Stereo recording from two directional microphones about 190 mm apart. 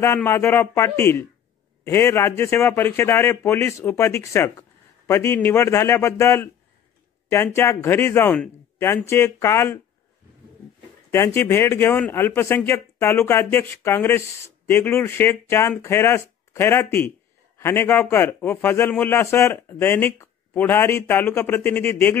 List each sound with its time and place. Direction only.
0.0 s speech: 15° left (ahead or behind)
11.1 s speech: 15° left (ahead or behind)